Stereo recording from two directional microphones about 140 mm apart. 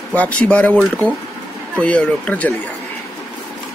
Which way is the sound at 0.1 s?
10° left (ahead or behind).